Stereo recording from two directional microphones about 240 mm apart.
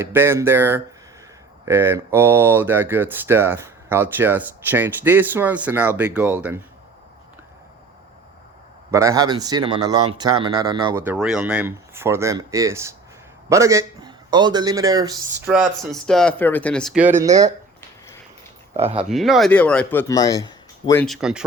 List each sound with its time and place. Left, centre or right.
0.0 s speech: centre
8.9 s speech: centre
11.0 s a man's voice: centre
15.4 s speech: centre
17.2 s speech: centre
18.9 s speech: centre
21.0 s speech: centre